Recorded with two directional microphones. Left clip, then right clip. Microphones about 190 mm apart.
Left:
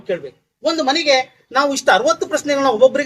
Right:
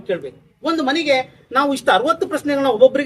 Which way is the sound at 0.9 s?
30° right (ahead or behind).